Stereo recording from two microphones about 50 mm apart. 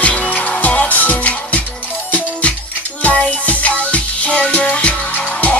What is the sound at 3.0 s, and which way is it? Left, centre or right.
Music, left.